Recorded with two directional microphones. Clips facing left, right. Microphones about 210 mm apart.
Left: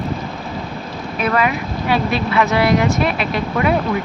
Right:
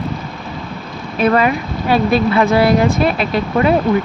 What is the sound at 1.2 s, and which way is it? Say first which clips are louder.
Speech: right 5 dB; 35° right (ahead or behind).